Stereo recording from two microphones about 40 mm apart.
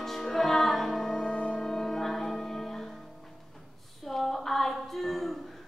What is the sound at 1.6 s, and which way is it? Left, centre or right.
Music, centre.